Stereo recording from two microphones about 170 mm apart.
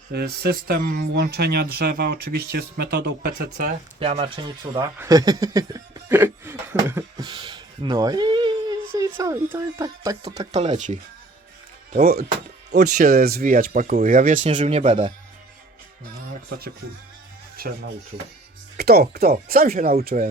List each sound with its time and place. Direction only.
0.1 s speech: 70° right (ahead or behind)
4.0 s speech: 30° right (ahead or behind); by 7.3 s 15° right (ahead or behind)
7.3 s speech: 25° right (ahead or behind)
8.9 s speech: 15° right (ahead or behind)
10.5 s speech: 40° right (ahead or behind)
11.9 s speech: 60° right (ahead or behind)
12.8 s speech: 50° right (ahead or behind)
14.6 s speech: 35° right (ahead or behind)
17.6 s speech: 60° right (ahead or behind)
18.8 s speech: 70° right (ahead or behind)